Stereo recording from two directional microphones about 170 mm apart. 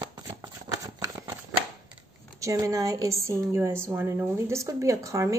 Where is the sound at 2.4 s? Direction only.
20° right (ahead or behind).